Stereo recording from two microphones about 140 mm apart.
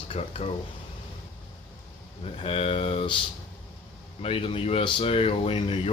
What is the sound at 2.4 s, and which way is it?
Speech, 40° left (ahead or behind).